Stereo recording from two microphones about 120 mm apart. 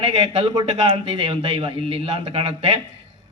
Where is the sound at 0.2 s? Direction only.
55° right (ahead or behind).